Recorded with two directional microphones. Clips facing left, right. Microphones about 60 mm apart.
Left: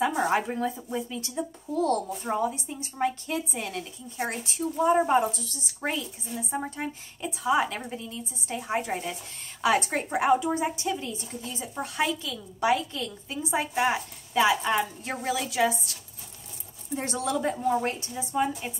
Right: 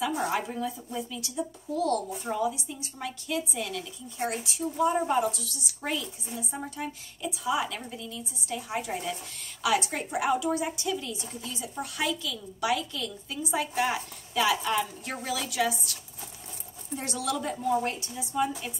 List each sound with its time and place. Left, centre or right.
0.0 s a woman's voice: left